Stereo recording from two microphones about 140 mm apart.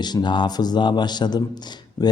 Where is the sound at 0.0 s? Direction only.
30° left (ahead or behind).